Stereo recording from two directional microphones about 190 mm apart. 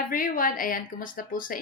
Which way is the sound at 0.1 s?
45° left (ahead or behind).